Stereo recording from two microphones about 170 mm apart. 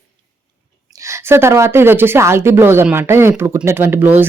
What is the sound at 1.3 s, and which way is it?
Speech, 15° right (ahead or behind).